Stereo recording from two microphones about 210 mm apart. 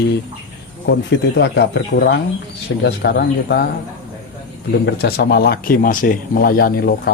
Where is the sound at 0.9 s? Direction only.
55° left (ahead or behind).